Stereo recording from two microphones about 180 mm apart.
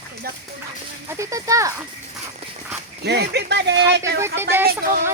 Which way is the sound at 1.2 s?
20° right (ahead or behind).